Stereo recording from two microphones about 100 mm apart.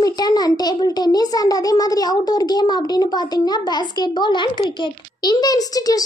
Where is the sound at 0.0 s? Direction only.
40° left (ahead or behind).